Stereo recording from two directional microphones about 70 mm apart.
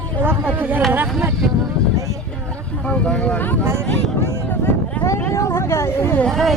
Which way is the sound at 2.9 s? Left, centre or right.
Centre.